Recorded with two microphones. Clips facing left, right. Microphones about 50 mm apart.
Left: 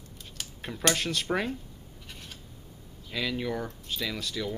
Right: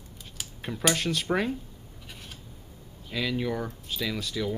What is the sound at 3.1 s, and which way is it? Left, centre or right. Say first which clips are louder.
Speech: right 2 dB; centre.